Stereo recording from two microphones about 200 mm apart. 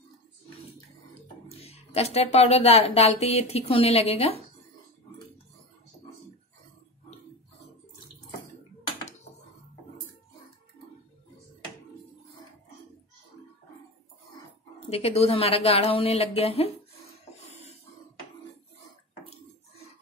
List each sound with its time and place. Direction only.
1.6 s speech: 30° left (ahead or behind)
14.9 s speech: 30° left (ahead or behind)
17.5 s a sound: 35° left (ahead or behind)